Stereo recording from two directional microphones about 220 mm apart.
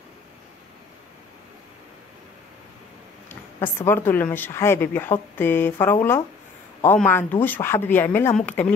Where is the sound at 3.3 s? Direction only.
10° left (ahead or behind).